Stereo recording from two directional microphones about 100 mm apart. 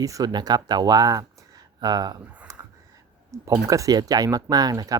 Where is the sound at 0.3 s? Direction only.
45° right (ahead or behind).